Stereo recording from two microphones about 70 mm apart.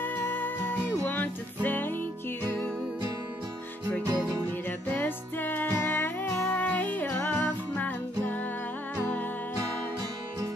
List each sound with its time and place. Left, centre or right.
0.0 s music: left
4.6 s music: left